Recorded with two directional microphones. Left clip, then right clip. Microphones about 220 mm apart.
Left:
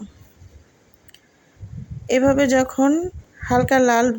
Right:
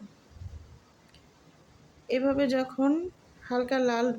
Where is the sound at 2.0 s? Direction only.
30° left (ahead or behind).